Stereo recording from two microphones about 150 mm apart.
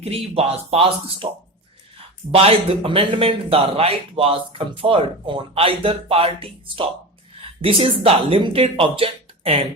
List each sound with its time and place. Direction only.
0.0 s speech: 40° right (ahead or behind)
2.3 s speech: 40° right (ahead or behind)